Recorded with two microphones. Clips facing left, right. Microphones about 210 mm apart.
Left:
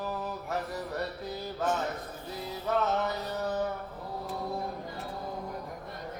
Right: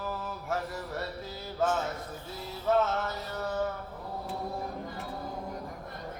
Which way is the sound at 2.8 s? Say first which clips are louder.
Left 3 dB; 15° left (ahead or behind).